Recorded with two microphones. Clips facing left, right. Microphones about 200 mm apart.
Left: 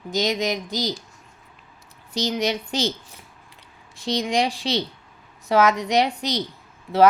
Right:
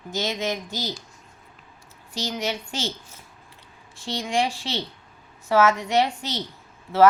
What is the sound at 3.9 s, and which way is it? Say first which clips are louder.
Speech: left 3 dB; 15° left (ahead or behind).